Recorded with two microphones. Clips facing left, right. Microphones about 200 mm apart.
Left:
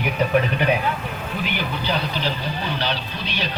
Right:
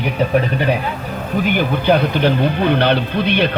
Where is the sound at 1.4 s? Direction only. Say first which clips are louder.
Right 10 dB; 50° right (ahead or behind).